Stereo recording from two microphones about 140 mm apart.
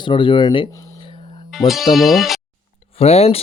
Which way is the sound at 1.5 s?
Centre (ahead or behind).